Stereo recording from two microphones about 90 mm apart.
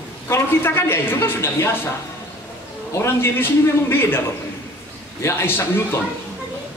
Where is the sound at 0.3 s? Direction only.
25° left (ahead or behind).